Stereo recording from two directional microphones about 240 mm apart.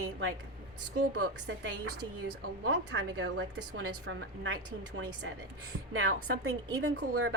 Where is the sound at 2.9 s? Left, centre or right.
Right.